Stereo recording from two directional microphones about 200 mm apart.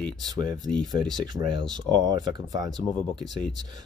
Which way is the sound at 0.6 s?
5° left (ahead or behind).